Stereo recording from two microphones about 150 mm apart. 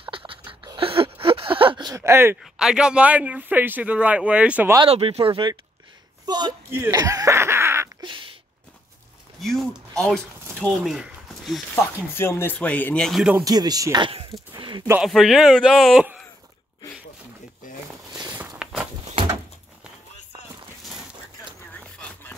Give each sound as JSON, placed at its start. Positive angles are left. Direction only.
{"t": 0.0, "sound": "a sound", "side_deg": -35}
{"t": 2.0, "sound": "speech", "side_deg": -15}
{"t": 2.4, "sound": "speech", "side_deg": -5}
{"t": 4.8, "sound": "a man's voice", "side_deg": -40}
{"t": 6.7, "sound": "a sound", "side_deg": -20}
{"t": 8.0, "sound": "duck", "side_deg": -35}
{"t": 9.4, "sound": "speech", "side_deg": 0}
{"t": 11.7, "sound": "speech", "side_deg": 15}
{"t": 13.4, "sound": "speech", "side_deg": -25}
{"t": 15.0, "sound": "a man's voice", "side_deg": 0}
{"t": 18.6, "sound": "a sound", "side_deg": -5}
{"t": 21.7, "sound": "a sound", "side_deg": 10}